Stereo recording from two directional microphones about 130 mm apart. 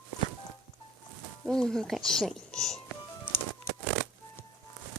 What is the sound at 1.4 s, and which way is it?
Speech, 5° left (ahead or behind).